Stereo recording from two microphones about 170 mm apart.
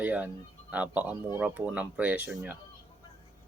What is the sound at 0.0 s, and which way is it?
Speech, 10° right (ahead or behind).